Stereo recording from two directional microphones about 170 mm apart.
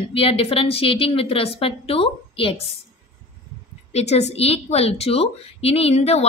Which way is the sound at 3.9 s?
40° left (ahead or behind).